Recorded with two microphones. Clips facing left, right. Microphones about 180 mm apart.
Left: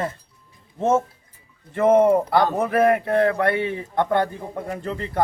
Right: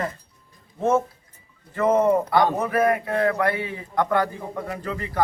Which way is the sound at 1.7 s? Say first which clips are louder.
Left 4 dB; 25° left (ahead or behind).